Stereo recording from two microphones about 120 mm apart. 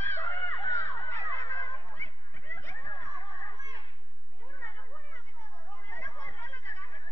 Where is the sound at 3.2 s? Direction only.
40° left (ahead or behind).